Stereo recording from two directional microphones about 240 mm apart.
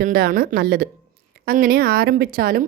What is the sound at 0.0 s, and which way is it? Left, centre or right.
A woman's voice, right.